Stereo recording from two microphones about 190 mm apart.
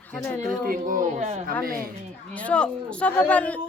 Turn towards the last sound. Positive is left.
turn(degrees=5)  # may be behind; listen again after turning